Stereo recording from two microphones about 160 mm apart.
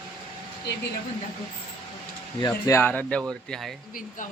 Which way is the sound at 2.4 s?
25° left (ahead or behind).